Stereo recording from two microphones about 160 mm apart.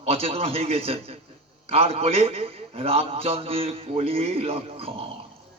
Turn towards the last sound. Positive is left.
turn(degrees=-35)  # may be behind; listen again after turning